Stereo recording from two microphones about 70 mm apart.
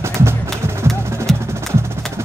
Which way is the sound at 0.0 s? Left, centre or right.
Right.